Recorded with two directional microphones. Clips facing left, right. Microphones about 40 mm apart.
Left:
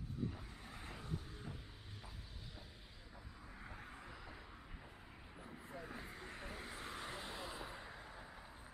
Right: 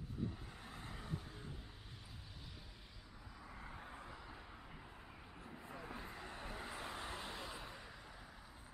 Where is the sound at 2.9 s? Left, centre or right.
Left.